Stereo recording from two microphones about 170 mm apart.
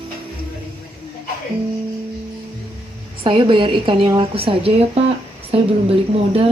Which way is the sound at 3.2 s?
30° right (ahead or behind).